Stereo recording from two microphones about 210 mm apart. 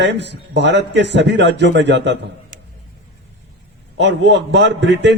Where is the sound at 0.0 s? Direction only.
55° right (ahead or behind).